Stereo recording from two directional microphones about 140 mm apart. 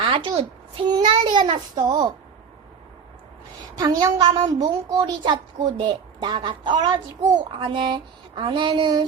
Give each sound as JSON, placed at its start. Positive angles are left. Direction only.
{"t": 0.0, "sound": "a woman's voice", "side_deg": -35}
{"t": 3.8, "sound": "a woman's voice", "side_deg": -30}